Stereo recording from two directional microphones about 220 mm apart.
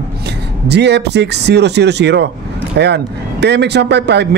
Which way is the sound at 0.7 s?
50° right (ahead or behind).